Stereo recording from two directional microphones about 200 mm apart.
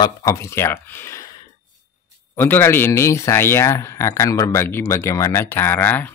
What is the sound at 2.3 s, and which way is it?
Speech, 10° left (ahead or behind).